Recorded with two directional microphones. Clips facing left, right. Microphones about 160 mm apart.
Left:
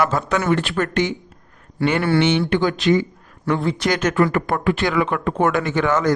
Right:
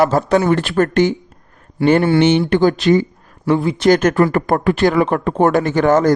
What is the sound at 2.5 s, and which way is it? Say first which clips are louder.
Speech: right 5 dB; 40° right (ahead or behind).